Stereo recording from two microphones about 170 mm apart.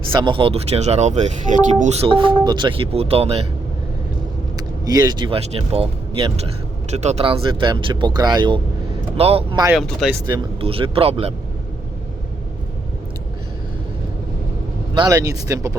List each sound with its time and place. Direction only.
0.1 s speech: 30° right (ahead or behind)
4.5 s vehicle: 25° right (ahead or behind)
5.4 s speech: 35° right (ahead or behind)
9.7 s speech: centre (ahead or behind)
10.6 s speech: 30° right (ahead or behind)
14.9 s speech: 20° right (ahead or behind)